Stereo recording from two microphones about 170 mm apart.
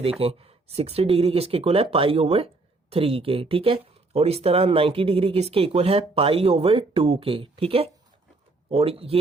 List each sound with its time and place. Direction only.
0.0 s speech: 35° right (ahead or behind)